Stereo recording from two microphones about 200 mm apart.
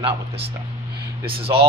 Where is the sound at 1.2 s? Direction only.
30° right (ahead or behind).